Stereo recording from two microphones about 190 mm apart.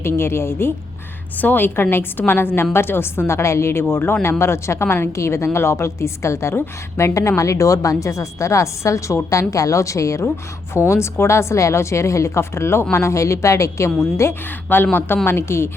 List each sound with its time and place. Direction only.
0.0 s a woman's voice: 15° left (ahead or behind)